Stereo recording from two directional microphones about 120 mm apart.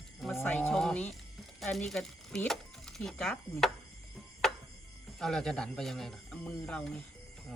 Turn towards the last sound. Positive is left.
turn(degrees=5)  # may be behind; listen again after turning